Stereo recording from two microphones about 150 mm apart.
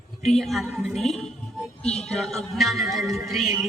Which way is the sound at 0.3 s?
Centre (ahead or behind).